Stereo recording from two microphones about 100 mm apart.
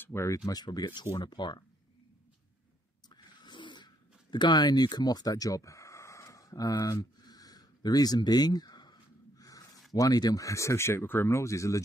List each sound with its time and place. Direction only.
0.0 s speech: 30° left (ahead or behind)
0.5 s speech: 45° left (ahead or behind)
3.4 s a sound: 50° left (ahead or behind)
9.9 s speech: 40° left (ahead or behind)